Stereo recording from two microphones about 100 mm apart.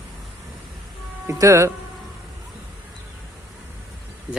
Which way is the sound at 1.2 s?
30° right (ahead or behind).